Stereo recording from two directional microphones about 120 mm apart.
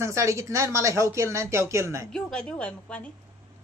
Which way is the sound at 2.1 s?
5° left (ahead or behind).